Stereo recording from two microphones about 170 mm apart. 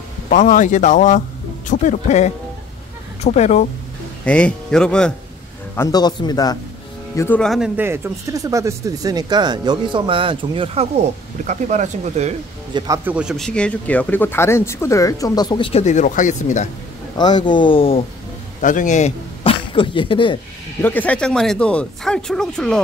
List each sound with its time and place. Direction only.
0.3 s speech: 50° left (ahead or behind)
4.2 s speech: 5° left (ahead or behind)
5.8 s speech: 25° left (ahead or behind)
7.2 s speech: 10° left (ahead or behind)
7.7 s speech: 15° right (ahead or behind); by 12.4 s 40° right (ahead or behind)
12.7 s speech: 20° right (ahead or behind)
13.1 s speech: 5° right (ahead or behind); by 15.8 s 30° left (ahead or behind)
15.8 s speech: 45° left (ahead or behind)
17.2 s speech: 25° left (ahead or behind)
18.6 s speech: 50° left (ahead or behind); by 20.3 s 30° left (ahead or behind)
20.8 s speech: 10° left (ahead or behind)